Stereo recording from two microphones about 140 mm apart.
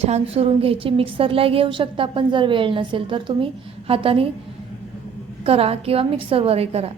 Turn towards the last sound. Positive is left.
turn(degrees=-45)  # may be behind; listen again after turning